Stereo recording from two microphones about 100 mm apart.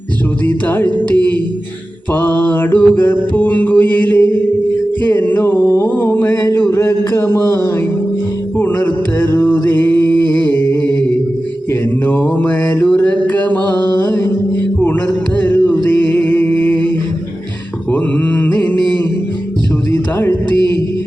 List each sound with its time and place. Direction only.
0.4 s music: 15° left (ahead or behind)
5.0 s a sound: 20° left (ahead or behind)
8.5 s a sound: 20° left (ahead or behind)
9.3 s music: 20° left (ahead or behind)
12.0 s mantra: 15° left (ahead or behind)
15.4 s music: 20° left (ahead or behind)
18.5 s music: 15° left (ahead or behind)
19.9 s music: 25° left (ahead or behind)